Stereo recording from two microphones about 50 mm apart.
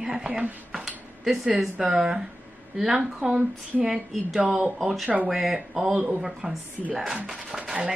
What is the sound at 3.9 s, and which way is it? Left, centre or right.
A woman's voice, centre.